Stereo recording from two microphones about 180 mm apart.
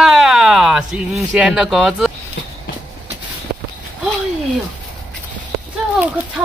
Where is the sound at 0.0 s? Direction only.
Centre (ahead or behind).